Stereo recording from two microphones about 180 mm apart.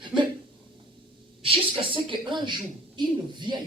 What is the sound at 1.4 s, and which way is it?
A woman's voice, 30° right (ahead or behind).